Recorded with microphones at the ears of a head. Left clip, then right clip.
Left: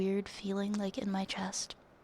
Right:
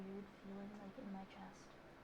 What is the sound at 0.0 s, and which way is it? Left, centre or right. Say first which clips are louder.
A woman's voice: left 19 dB; left.